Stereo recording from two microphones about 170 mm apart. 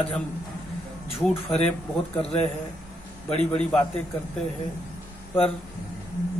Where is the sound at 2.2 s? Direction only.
35° left (ahead or behind).